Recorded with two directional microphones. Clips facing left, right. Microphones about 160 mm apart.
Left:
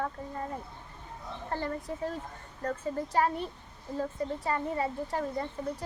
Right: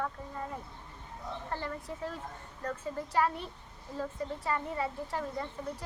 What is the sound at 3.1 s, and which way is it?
A woman's voice, 45° left (ahead or behind).